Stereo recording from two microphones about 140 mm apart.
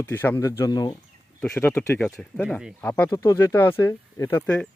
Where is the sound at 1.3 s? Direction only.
5° left (ahead or behind).